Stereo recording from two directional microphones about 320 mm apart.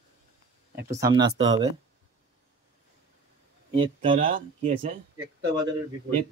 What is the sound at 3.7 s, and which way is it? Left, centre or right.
Speech, centre.